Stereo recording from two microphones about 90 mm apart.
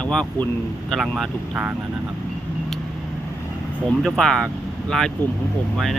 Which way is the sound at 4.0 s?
Centre (ahead or behind).